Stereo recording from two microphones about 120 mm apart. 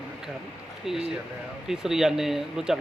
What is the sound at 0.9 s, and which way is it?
Speech, centre (ahead or behind).